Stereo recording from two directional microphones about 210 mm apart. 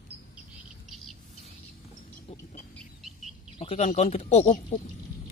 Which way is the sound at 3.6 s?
30° left (ahead or behind).